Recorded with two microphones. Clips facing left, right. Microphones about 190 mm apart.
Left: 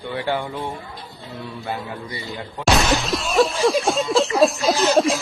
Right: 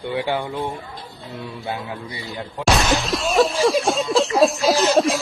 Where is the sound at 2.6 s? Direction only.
Centre (ahead or behind).